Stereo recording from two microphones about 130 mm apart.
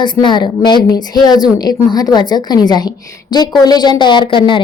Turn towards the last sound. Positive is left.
turn(degrees=40)  # may be behind; listen again after turning